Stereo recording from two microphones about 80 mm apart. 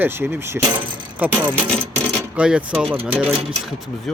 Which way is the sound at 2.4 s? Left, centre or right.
Centre.